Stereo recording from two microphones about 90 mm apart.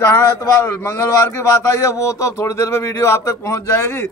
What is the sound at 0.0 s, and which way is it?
A man's voice, 30° left (ahead or behind).